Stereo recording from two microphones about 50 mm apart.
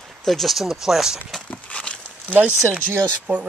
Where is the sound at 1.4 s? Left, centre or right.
Left.